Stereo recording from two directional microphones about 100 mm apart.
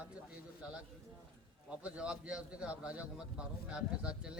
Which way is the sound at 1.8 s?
10° right (ahead or behind).